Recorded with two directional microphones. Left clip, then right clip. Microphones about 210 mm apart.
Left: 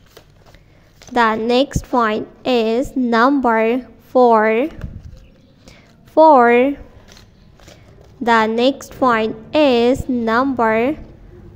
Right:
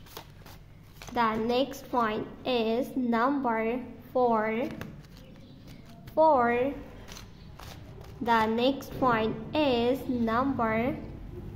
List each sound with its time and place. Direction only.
1.1 s a woman's voice: 30° left (ahead or behind)
6.1 s a woman's voice: 35° left (ahead or behind)
8.2 s a woman's voice: 30° left (ahead or behind)